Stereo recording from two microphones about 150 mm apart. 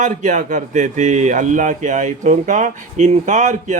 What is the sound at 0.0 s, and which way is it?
A man's voice, 55° right (ahead or behind).